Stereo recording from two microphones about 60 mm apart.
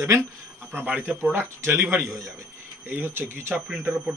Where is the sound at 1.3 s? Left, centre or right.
Right.